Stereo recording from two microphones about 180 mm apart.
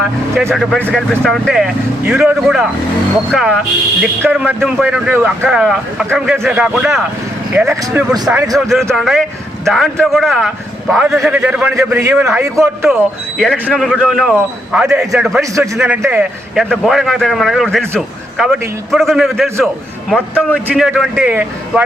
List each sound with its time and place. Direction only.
0.5 s a man's voice: centre (ahead or behind)
7.8 s a man's voice: 20° right (ahead or behind)
8.9 s a man's voice: centre (ahead or behind)
12.9 s a man's voice: centre (ahead or behind)
15.4 s a man's voice: 15° right (ahead or behind)